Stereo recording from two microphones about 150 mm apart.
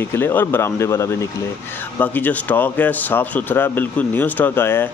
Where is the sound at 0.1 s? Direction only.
15° left (ahead or behind).